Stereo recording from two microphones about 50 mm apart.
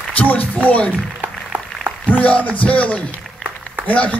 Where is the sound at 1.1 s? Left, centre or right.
Right.